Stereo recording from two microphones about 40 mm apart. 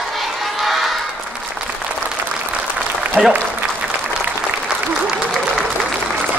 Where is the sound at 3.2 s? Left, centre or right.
Right.